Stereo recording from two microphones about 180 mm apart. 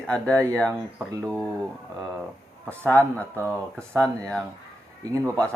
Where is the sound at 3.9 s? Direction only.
5° left (ahead or behind).